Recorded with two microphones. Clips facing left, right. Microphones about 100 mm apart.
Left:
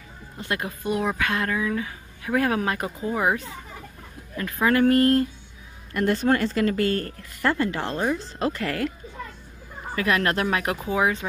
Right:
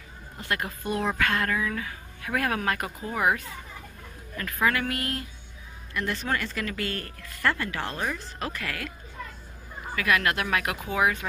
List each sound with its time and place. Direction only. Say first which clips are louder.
0.4 s speech: left 2 dB; 20° left (ahead or behind)
4.7 s speech: left 12 dB; 40° left (ahead or behind)
9.9 s speech: left 2 dB; 30° left (ahead or behind)